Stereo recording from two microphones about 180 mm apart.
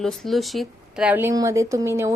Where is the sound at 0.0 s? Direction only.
Centre (ahead or behind).